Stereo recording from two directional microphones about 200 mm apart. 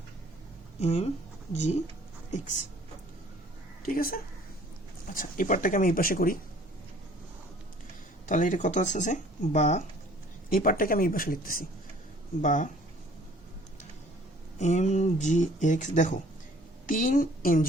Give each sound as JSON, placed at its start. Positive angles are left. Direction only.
{"t": 0.8, "sound": "speech", "side_deg": 35}
{"t": 3.8, "sound": "speech", "side_deg": 45}
{"t": 8.3, "sound": "speech", "side_deg": 40}
{"t": 14.6, "sound": "a woman's voice", "side_deg": 35}